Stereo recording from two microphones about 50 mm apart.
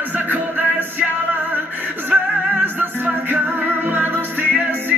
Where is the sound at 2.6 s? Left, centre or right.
Right.